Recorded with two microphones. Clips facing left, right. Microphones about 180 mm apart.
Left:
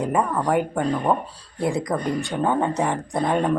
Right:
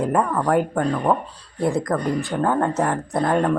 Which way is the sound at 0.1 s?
5° left (ahead or behind).